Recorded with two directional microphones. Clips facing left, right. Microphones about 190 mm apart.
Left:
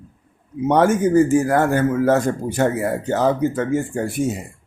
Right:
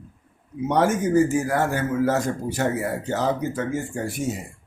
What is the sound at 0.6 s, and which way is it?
A man's voice, 55° left (ahead or behind).